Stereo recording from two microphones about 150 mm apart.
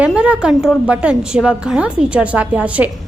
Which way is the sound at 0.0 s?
10° right (ahead or behind).